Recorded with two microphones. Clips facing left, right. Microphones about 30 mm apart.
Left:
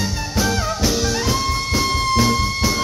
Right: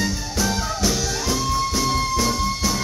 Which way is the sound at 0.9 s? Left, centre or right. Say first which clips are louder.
Left 4 dB; left.